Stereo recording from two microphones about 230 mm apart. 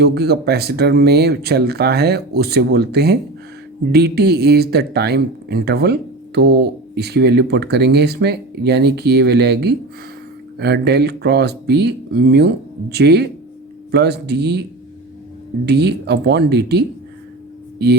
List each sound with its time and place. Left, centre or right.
0.0 s speech: right
15.6 s speech: right